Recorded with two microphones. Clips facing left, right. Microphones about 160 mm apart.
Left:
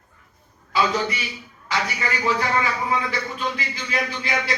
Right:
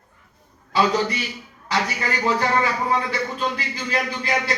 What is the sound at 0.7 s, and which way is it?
Speech, 35° right (ahead or behind).